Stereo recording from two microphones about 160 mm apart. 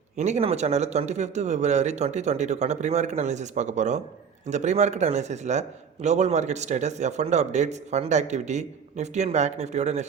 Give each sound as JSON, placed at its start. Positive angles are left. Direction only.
{"t": 0.2, "sound": "a man's voice", "side_deg": -40}